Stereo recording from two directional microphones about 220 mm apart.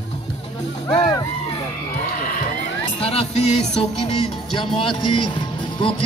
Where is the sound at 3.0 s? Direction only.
25° left (ahead or behind).